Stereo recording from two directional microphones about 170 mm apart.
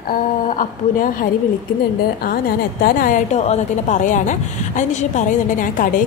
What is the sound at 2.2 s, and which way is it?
A woman's voice, 60° left (ahead or behind).